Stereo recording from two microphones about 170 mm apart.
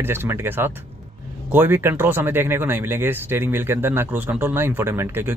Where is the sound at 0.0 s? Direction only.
15° right (ahead or behind).